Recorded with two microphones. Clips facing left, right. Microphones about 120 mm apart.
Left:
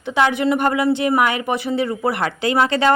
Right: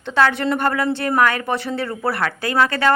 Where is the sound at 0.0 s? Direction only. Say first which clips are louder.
Left 1 dB; 15° left (ahead or behind).